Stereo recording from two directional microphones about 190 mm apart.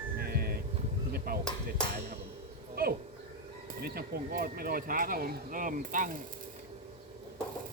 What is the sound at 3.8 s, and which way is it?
Speech, 55° right (ahead or behind).